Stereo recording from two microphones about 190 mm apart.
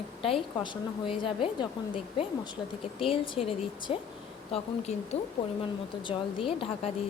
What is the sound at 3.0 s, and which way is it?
Speech, 30° left (ahead or behind).